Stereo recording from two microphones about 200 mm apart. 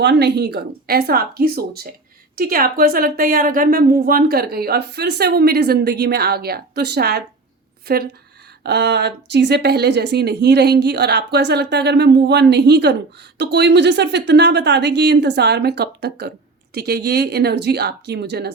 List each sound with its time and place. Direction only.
0.0 s a woman's voice: 60° right (ahead or behind)